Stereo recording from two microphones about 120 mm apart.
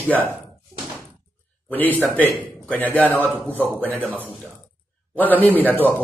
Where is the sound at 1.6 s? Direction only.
15° left (ahead or behind).